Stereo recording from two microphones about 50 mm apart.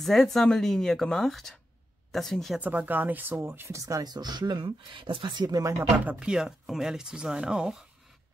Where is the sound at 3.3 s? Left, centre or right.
Right.